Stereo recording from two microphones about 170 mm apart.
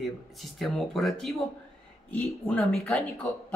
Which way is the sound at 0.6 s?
Centre (ahead or behind).